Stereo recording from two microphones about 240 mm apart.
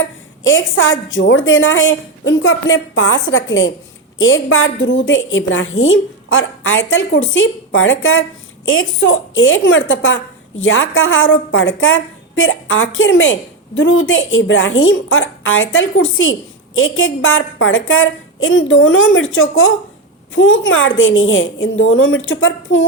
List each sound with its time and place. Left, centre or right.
0.4 s a woman's voice: left